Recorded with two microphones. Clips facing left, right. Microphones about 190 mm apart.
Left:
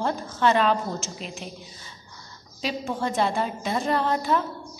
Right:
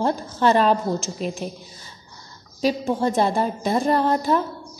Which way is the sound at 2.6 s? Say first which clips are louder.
Right 7 dB; 35° right (ahead or behind).